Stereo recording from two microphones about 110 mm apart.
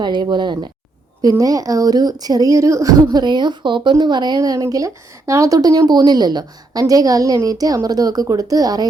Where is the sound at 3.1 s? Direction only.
40° right (ahead or behind).